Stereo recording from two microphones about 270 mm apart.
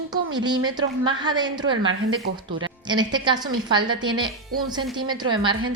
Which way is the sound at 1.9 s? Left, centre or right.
Right.